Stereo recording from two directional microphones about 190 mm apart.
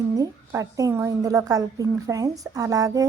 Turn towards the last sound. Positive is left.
turn(degrees=-20)  # may be behind; listen again after turning